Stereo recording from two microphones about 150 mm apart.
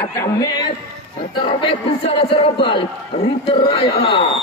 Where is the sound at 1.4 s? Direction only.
35° left (ahead or behind).